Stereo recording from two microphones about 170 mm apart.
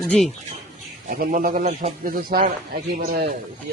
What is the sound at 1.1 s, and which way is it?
Speech, 55° right (ahead or behind).